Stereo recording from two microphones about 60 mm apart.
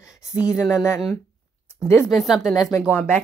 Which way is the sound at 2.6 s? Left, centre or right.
Left.